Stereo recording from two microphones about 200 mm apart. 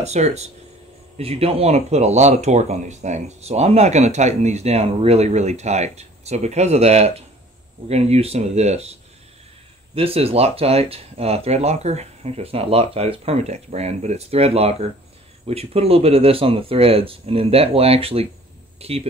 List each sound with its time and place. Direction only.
0.0 s speech: 35° right (ahead or behind)
9.9 s speech: 30° right (ahead or behind)